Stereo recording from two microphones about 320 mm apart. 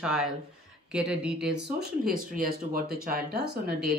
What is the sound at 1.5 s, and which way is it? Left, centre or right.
Speech, right.